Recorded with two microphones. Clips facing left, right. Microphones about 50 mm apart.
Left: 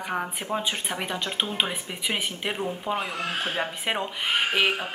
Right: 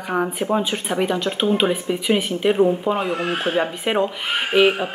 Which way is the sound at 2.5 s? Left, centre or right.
Centre.